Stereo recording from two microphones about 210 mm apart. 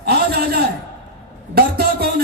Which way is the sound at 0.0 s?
50° right (ahead or behind).